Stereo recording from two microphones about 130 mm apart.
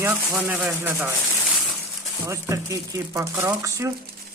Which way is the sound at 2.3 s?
25° right (ahead or behind).